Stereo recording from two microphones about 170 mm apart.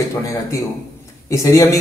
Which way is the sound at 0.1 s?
20° left (ahead or behind).